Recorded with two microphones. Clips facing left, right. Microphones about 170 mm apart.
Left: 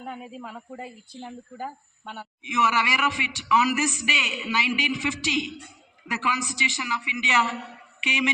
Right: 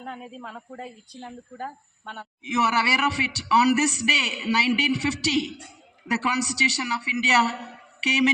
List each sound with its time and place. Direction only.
0.0 s a woman's voice: 5° left (ahead or behind)
2.4 s speech: 35° right (ahead or behind)